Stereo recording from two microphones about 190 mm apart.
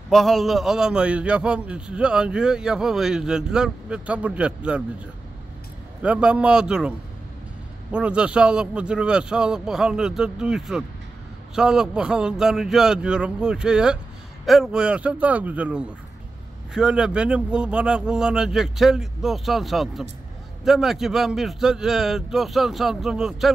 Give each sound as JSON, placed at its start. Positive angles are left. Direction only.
{"t": 0.1, "sound": "a man's voice", "side_deg": 0}
{"t": 6.0, "sound": "a man's voice", "side_deg": -5}
{"t": 7.9, "sound": "a man's voice", "side_deg": -5}